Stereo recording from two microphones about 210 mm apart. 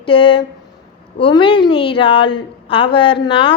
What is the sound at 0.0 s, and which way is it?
A woman's voice, 25° left (ahead or behind).